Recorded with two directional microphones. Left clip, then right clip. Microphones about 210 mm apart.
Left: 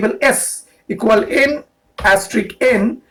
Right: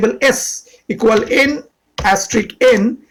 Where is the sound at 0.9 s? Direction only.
35° right (ahead or behind).